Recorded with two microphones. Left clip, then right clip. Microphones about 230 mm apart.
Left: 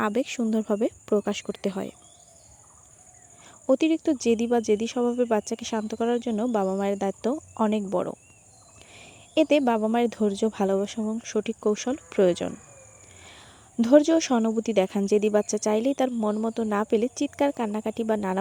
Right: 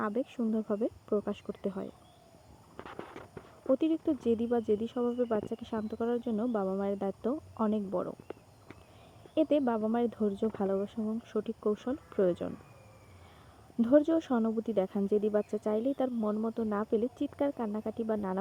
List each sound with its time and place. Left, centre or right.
0.0 s speech: left
3.7 s speech: left
9.3 s speech: left
13.7 s speech: left